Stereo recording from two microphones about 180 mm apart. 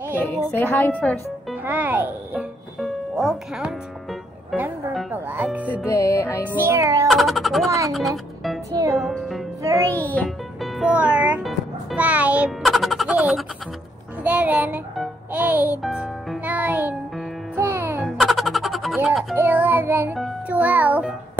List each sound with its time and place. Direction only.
0.5 s a woman's voice: 10° left (ahead or behind)
1.5 s a child's voice: 10° right (ahead or behind)
2.8 s music: centre (ahead or behind)
5.9 s music: 15° left (ahead or behind)
6.4 s speech: 15° right (ahead or behind)
7.1 s a sound: centre (ahead or behind)
8.9 s music: centre (ahead or behind)
9.6 s music: 15° right (ahead or behind)
10.0 s music: 5° left (ahead or behind); by 18.1 s 10° right (ahead or behind)
18.1 s music: centre (ahead or behind)
19.3 s music: 10° right (ahead or behind)